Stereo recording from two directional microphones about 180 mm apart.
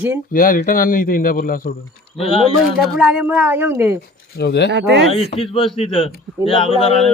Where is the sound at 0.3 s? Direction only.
50° left (ahead or behind).